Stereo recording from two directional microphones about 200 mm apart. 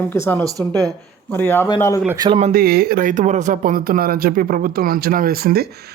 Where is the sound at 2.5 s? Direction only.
50° right (ahead or behind).